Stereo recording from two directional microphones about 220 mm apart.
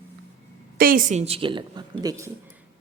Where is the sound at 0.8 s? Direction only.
40° right (ahead or behind); by 2.3 s 15° right (ahead or behind).